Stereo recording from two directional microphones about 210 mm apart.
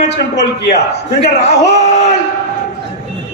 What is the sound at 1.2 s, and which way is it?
Speech, 30° left (ahead or behind).